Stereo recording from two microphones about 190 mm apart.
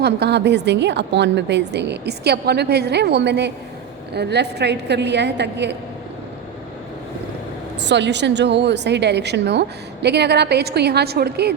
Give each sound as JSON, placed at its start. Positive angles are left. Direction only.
{"t": 0.0, "sound": "a woman's voice", "side_deg": -60}
{"t": 7.8, "sound": "a woman's voice", "side_deg": -65}